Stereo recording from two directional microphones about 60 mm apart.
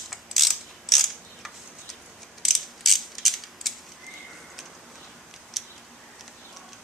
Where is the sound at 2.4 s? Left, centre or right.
Centre.